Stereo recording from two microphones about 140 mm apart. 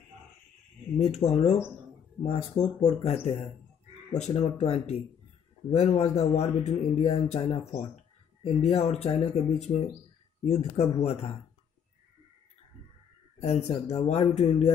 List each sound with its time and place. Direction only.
0.9 s speech: 50° left (ahead or behind)
2.2 s speech: 25° left (ahead or behind)
2.8 s speech: 45° left (ahead or behind)
4.3 s speech: 45° left (ahead or behind)
6.7 s speech: 35° left (ahead or behind)
13.4 s speech: 45° left (ahead or behind)